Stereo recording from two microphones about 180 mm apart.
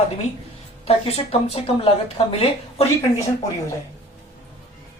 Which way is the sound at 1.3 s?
35° left (ahead or behind).